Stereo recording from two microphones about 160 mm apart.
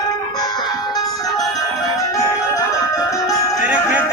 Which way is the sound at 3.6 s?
10° right (ahead or behind).